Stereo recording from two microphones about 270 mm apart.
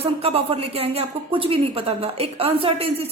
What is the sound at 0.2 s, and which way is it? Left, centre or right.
A woman's voice, right.